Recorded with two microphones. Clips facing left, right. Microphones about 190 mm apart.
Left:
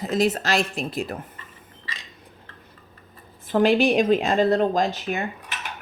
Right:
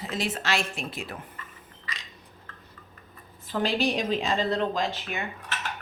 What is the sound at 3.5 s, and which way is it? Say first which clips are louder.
Speech: left 8 dB; 50° left (ahead or behind).